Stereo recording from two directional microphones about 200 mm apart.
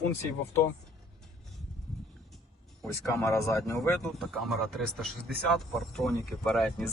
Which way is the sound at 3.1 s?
15° left (ahead or behind).